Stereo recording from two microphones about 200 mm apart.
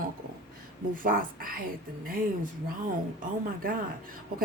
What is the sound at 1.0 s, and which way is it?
Speech, 45° right (ahead or behind).